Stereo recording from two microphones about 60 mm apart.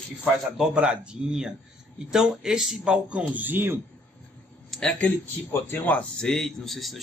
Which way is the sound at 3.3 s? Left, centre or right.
Right.